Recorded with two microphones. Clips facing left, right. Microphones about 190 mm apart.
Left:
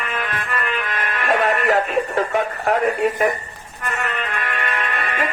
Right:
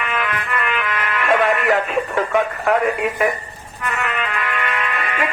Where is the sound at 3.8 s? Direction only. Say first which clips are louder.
Right 2 dB; 35° left (ahead or behind).